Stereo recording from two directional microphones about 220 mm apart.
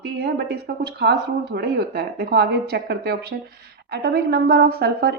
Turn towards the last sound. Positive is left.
turn(degrees=-45)  # may be behind; listen again after turning